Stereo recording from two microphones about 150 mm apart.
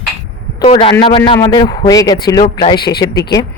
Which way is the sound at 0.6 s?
35° left (ahead or behind).